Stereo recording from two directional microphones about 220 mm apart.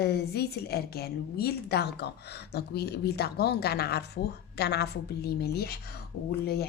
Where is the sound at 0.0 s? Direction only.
45° left (ahead or behind).